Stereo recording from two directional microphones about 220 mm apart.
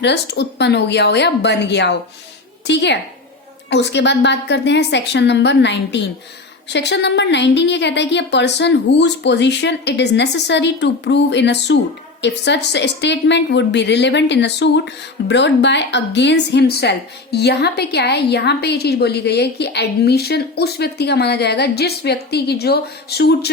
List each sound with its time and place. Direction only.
0.0 s a woman's voice: 50° left (ahead or behind)